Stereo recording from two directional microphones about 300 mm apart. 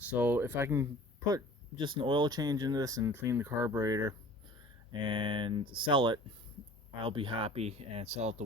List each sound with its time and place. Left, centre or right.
0.0 s speech: centre; by 8.4 s right